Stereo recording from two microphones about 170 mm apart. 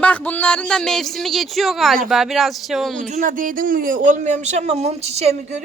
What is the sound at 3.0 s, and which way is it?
Speech, 45° right (ahead or behind).